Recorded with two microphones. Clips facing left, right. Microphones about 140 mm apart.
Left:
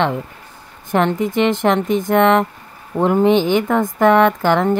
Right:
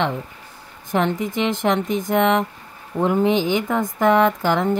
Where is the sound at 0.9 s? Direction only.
60° left (ahead or behind).